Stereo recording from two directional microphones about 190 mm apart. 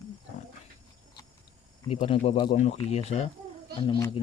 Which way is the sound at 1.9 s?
30° left (ahead or behind).